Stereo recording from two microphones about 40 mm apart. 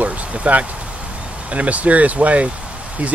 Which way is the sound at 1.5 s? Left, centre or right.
Right.